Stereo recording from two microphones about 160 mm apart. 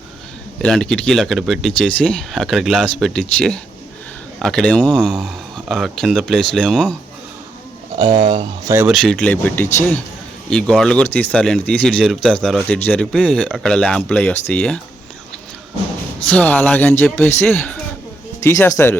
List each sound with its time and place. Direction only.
0.6 s speech: 5° left (ahead or behind)
5.1 s speech: 5° right (ahead or behind)
7.9 s speech: 30° right (ahead or behind)
8.9 s speech: 5° left (ahead or behind)
16.3 s speech: 10° left (ahead or behind)